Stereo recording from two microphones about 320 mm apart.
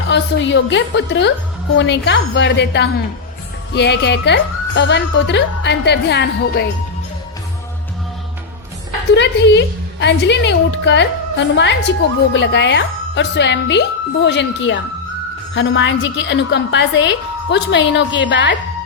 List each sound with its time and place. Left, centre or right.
0.1 s a woman's voice: left
9.1 s a woman's voice: left